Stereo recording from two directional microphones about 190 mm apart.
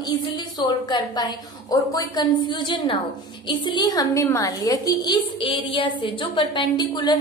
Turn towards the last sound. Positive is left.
turn(degrees=20)  # may be behind; listen again after turning